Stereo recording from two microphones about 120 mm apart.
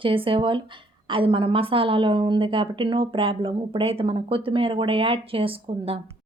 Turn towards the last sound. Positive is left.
turn(degrees=-50)  # may be behind; listen again after turning